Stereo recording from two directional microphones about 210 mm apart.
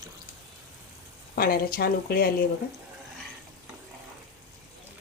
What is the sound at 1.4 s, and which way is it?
Speech, 45° left (ahead or behind).